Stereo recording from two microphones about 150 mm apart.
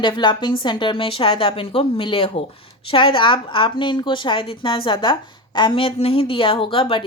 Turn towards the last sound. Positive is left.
turn(degrees=35)  # may be behind; listen again after turning